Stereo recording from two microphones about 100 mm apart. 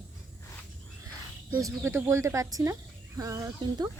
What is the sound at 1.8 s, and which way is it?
Speech, 25° right (ahead or behind).